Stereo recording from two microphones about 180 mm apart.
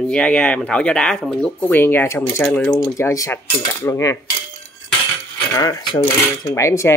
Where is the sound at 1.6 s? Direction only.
10° left (ahead or behind).